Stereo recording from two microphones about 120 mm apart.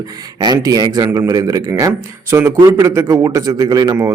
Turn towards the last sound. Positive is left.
turn(degrees=-25)  # may be behind; listen again after turning